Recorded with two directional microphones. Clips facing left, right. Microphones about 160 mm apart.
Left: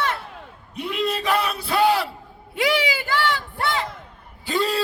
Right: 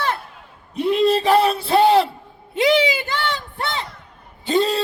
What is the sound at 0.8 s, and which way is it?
Speech, 30° right (ahead or behind).